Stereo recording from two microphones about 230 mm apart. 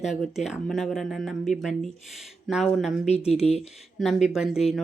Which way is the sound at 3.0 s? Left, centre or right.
Left.